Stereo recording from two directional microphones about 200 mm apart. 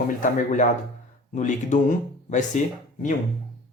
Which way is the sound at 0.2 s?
40° left (ahead or behind).